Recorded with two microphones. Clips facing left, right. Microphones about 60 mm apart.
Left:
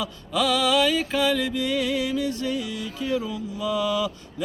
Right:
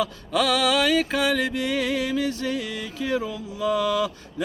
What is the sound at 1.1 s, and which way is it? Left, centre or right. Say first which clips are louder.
Music: even; right.